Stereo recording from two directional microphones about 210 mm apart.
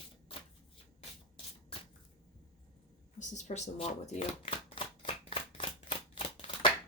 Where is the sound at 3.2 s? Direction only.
35° left (ahead or behind).